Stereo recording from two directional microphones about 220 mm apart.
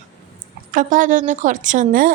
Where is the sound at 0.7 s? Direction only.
40° right (ahead or behind).